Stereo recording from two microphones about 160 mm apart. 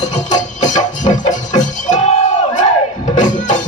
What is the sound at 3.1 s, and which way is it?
Music, 50° left (ahead or behind).